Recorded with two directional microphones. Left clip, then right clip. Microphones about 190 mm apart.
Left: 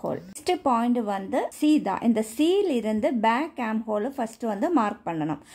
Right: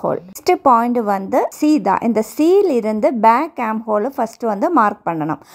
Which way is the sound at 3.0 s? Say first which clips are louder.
Right 12 dB; 30° right (ahead or behind).